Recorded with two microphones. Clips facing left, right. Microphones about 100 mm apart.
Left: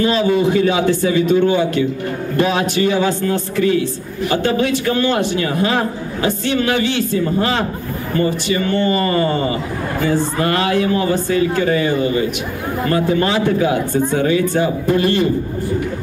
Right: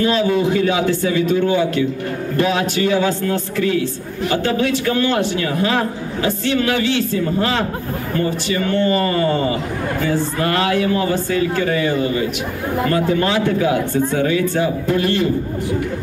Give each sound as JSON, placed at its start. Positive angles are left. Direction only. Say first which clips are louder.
{"t": 0.0, "sound": "a man's voice", "louder": "left 1 dB", "side_deg": 20}